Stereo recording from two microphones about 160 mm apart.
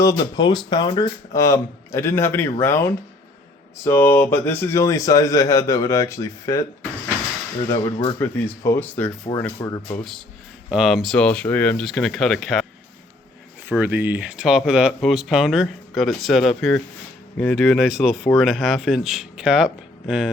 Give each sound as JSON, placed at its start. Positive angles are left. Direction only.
{"t": 0.0, "sound": "speech", "side_deg": 25}
{"t": 8.2, "sound": "speech", "side_deg": 15}
{"t": 10.0, "sound": "speech", "side_deg": 0}
{"t": 13.7, "sound": "speech", "side_deg": -10}